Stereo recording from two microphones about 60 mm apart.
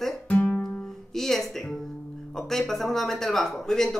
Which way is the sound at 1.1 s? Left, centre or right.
Centre.